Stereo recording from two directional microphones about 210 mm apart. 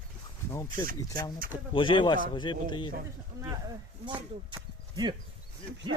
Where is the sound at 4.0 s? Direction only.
20° right (ahead or behind).